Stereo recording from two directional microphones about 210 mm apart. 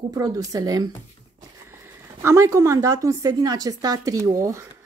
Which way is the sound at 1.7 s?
10° right (ahead or behind).